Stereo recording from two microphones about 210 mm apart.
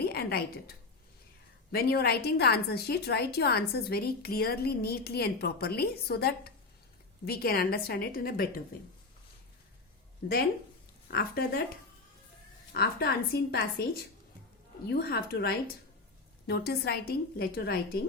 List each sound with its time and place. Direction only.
0.0 s a woman's voice: 50° left (ahead or behind)
10.2 s a woman's voice: 45° left (ahead or behind)
12.7 s a woman's voice: 50° left (ahead or behind)